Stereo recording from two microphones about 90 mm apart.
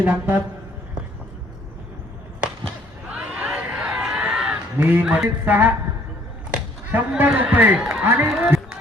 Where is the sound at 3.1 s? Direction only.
10° right (ahead or behind).